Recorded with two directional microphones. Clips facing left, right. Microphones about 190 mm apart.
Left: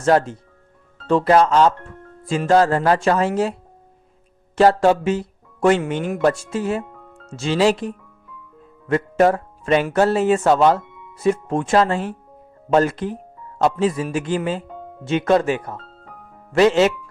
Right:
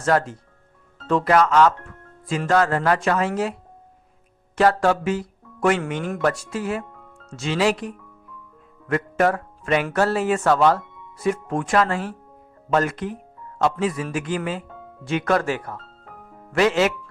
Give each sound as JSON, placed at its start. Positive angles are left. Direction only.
{"t": 0.0, "sound": "speech", "side_deg": 25}
{"t": 4.5, "sound": "speech", "side_deg": 30}